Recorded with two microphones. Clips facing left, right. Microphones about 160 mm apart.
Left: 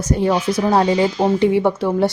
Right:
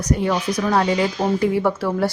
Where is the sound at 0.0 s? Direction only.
25° left (ahead or behind).